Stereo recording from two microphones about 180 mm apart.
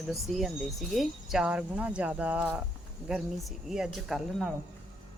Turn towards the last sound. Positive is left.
turn(degrees=0)  # may be behind; listen again after turning